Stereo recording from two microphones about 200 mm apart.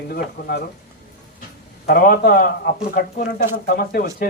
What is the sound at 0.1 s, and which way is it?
Speech, 50° left (ahead or behind).